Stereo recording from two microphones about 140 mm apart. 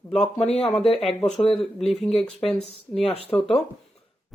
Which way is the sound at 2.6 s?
45° left (ahead or behind).